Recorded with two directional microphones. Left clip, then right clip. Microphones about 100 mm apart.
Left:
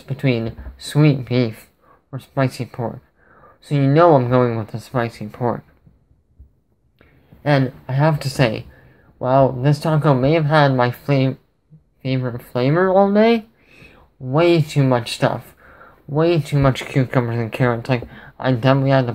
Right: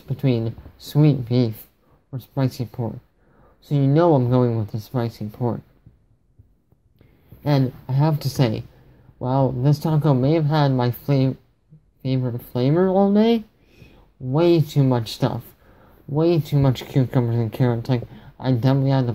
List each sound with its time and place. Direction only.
0.1 s speech: 25° right (ahead or behind)
7.0 s speech: 35° right (ahead or behind)
14.3 s speech: 35° right (ahead or behind)